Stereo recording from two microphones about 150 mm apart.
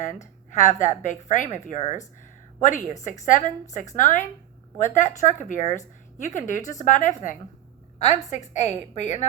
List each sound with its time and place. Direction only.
0.5 s a woman's voice: 55° left (ahead or behind)